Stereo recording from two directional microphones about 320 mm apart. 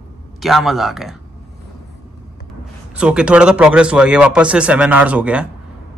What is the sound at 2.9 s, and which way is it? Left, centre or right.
A man's voice, centre.